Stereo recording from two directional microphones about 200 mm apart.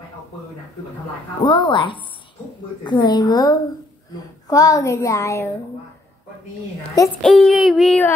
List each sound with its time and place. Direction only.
1.4 s a woman's voice: 25° left (ahead or behind)
7.2 s child singing: centre (ahead or behind)